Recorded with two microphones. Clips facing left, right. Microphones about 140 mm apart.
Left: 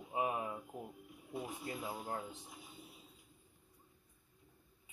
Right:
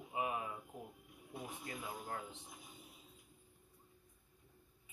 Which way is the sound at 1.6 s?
35° left (ahead or behind).